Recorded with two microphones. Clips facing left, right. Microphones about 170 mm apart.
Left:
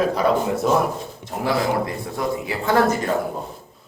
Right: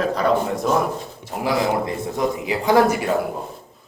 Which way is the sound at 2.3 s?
20° right (ahead or behind).